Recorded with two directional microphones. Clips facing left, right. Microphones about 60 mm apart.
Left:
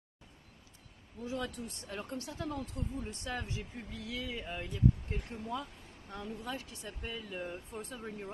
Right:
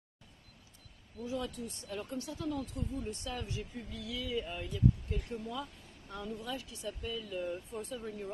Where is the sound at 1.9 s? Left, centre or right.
Left.